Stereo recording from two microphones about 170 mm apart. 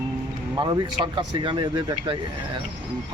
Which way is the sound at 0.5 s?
25° right (ahead or behind).